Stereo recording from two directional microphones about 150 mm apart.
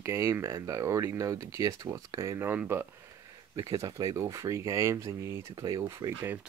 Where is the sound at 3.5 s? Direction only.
25° right (ahead or behind).